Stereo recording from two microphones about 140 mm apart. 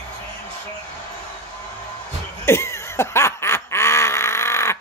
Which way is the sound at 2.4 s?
20° left (ahead or behind).